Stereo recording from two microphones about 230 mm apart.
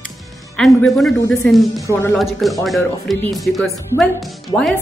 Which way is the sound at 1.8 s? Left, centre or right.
Centre.